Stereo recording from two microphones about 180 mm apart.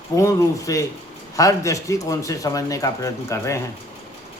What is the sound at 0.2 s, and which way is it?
A man's voice, 15° left (ahead or behind).